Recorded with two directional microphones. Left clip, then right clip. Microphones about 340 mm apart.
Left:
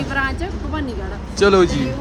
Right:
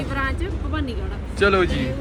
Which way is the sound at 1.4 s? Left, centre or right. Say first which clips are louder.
Left 4 dB; centre.